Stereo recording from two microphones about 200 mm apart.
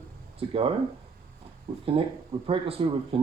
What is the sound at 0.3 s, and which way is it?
Speech, 30° right (ahead or behind).